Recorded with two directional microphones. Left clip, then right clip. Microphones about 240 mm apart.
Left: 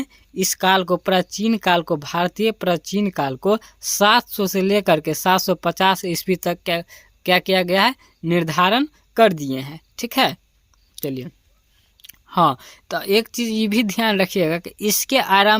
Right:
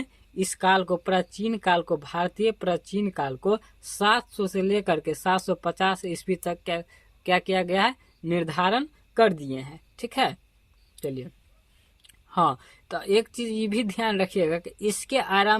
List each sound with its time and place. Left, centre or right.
0.0 s speech: left